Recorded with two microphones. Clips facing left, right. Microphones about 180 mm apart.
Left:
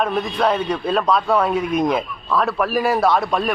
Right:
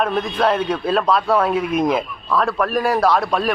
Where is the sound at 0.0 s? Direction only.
Centre (ahead or behind).